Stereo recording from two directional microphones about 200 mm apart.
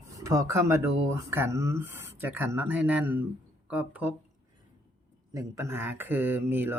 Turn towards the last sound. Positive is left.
turn(degrees=-10)  # may be behind; listen again after turning